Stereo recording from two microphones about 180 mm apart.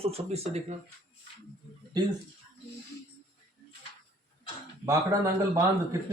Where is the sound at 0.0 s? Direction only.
35° right (ahead or behind).